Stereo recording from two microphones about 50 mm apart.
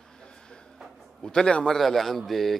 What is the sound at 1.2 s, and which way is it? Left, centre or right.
Speech, centre.